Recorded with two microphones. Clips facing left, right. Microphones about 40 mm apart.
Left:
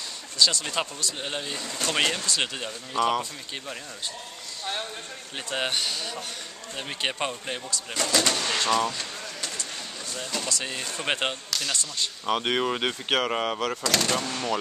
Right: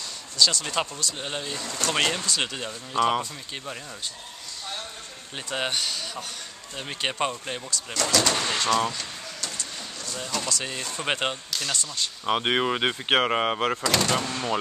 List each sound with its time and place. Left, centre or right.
0.4 s speech: centre
5.3 s speech: centre
8.5 s speech: centre
10.1 s speech: centre
12.3 s speech: centre
13.9 s speech: centre